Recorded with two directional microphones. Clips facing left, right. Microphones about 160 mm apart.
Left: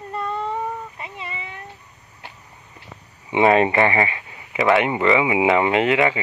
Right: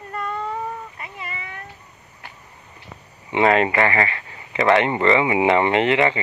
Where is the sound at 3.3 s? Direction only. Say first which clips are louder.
Left 2 dB; 20° left (ahead or behind).